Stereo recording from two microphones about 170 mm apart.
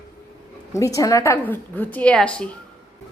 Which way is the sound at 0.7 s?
20° left (ahead or behind).